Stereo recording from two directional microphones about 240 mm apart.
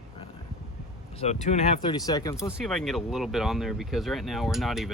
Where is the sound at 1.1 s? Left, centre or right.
Left.